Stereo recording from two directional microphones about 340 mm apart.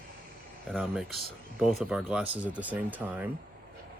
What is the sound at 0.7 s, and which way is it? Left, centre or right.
Speech, centre.